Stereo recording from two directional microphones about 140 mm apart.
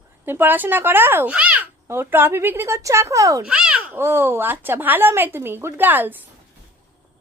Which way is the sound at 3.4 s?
5° right (ahead or behind).